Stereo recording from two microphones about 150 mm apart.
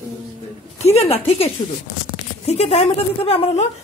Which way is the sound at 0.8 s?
45° left (ahead or behind).